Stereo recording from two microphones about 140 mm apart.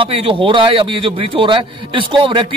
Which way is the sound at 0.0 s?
40° right (ahead or behind).